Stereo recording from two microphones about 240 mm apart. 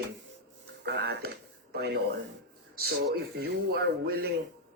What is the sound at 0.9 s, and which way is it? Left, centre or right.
Speech, right.